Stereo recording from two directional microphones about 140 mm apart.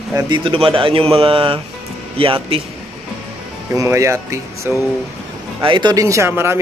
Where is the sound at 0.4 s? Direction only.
40° right (ahead or behind).